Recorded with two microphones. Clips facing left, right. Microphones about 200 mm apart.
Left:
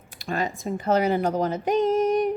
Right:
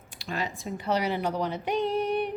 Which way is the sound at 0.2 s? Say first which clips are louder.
Left 5 dB; 50° left (ahead or behind).